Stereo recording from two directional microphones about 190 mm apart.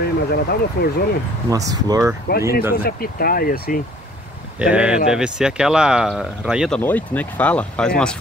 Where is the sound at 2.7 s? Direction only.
50° left (ahead or behind).